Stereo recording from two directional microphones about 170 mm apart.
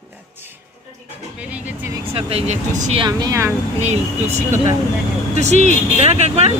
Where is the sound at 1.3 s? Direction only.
10° right (ahead or behind).